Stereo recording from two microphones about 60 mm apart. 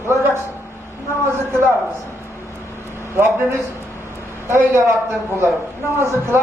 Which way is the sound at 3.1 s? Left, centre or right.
Right.